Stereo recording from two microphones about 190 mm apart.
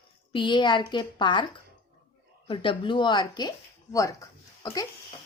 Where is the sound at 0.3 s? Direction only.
25° left (ahead or behind).